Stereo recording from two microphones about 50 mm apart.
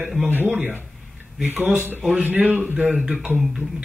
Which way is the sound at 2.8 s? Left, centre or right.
Centre.